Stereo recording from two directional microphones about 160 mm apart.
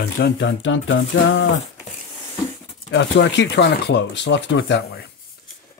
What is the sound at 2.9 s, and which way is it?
Speech, 90° left.